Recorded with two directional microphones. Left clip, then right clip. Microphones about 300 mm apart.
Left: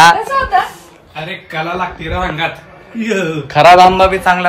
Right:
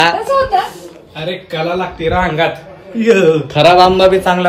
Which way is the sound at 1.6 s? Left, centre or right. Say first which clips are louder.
Right 4 dB; centre.